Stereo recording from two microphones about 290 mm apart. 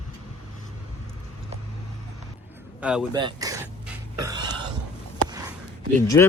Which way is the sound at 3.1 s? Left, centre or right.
Centre.